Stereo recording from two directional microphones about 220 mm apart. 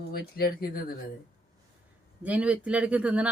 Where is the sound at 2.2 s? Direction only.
5° right (ahead or behind).